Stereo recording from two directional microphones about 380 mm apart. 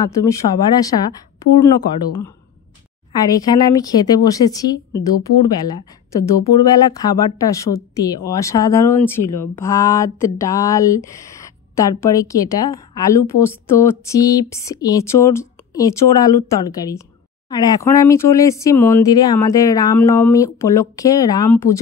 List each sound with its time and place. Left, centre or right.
0.0 s a woman's voice: centre
3.2 s a woman's voice: centre